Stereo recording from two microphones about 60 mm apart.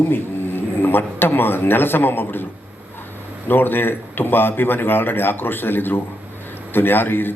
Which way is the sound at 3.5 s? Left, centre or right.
Left.